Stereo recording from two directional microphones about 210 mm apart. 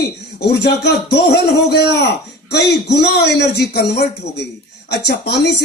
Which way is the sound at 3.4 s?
50° left (ahead or behind).